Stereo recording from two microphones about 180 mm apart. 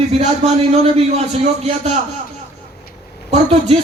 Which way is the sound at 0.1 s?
35° right (ahead or behind).